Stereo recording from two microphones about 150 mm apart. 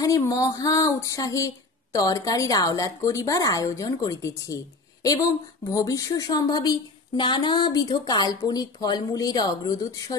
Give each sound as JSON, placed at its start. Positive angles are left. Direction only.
{"t": 0.0, "sound": "a woman's voice", "side_deg": 20}